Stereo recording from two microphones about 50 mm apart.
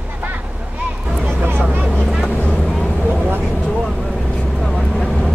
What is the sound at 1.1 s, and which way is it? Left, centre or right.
Vehicle, centre.